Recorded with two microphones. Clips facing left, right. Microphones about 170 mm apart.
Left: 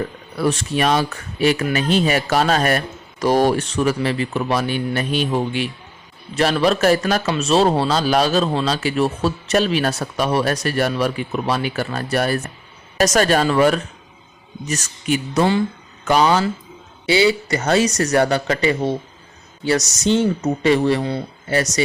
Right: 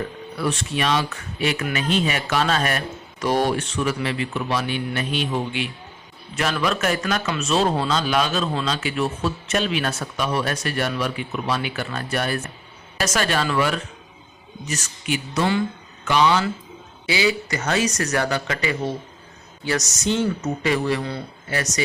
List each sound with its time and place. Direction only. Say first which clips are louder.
0.3 s a man's voice: left 5 dB; 40° left (ahead or behind)